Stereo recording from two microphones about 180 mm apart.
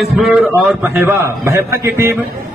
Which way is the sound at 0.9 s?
10° right (ahead or behind).